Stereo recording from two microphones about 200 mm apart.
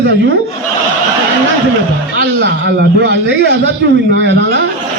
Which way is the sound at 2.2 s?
60° right (ahead or behind).